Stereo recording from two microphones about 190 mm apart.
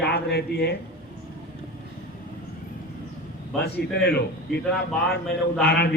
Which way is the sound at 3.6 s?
60° left (ahead or behind).